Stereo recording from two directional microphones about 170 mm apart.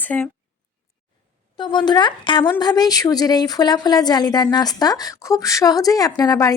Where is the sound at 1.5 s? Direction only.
25° left (ahead or behind).